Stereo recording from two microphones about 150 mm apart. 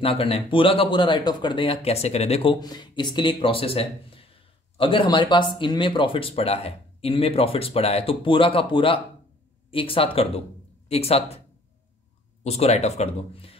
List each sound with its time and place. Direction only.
0.0 s speech: 40° left (ahead or behind)
12.4 s speech: 45° left (ahead or behind)